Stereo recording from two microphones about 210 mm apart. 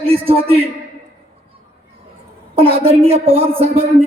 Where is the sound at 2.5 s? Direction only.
25° right (ahead or behind).